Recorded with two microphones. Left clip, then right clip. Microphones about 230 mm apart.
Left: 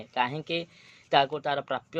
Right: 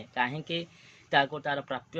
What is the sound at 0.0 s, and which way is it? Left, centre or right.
A man's voice, left.